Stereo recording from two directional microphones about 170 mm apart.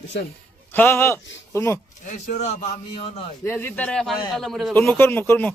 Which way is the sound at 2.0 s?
45° left (ahead or behind).